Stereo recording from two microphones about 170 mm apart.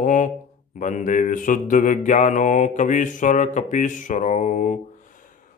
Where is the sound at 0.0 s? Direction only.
50° left (ahead or behind).